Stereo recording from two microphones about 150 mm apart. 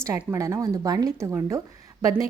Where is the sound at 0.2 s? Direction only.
20° right (ahead or behind).